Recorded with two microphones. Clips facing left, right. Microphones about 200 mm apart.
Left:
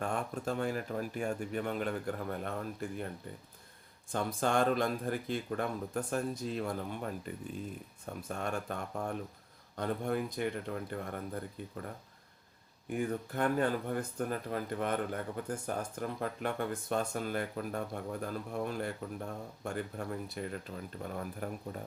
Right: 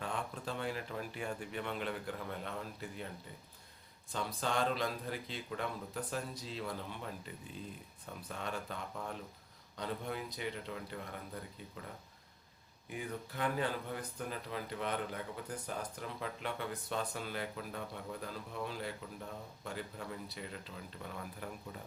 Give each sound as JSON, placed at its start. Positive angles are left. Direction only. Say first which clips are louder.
{"t": 0.0, "sound": "speech", "louder": "left 5 dB", "side_deg": 45}
{"t": 4.1, "sound": "speech", "louder": "left 6 dB", "side_deg": 50}
{"t": 12.9, "sound": "speech", "louder": "left 8 dB", "side_deg": 50}